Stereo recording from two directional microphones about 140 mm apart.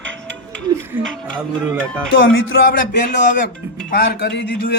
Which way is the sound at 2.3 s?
85° left.